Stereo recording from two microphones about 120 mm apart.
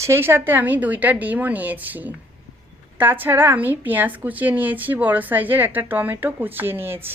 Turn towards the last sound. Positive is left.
turn(degrees=-20)  # may be behind; listen again after turning